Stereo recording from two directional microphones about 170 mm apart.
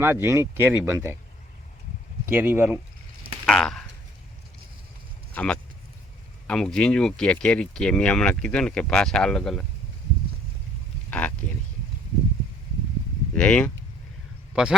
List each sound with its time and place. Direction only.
0.0 s speech: 15° right (ahead or behind)
2.3 s speech: 10° right (ahead or behind)
3.4 s speech: 5° left (ahead or behind)
5.3 s speech: 5° left (ahead or behind)
11.1 s speech: 10° left (ahead or behind)
13.3 s speech: 10° left (ahead or behind)
14.5 s a man's voice: 5° right (ahead or behind)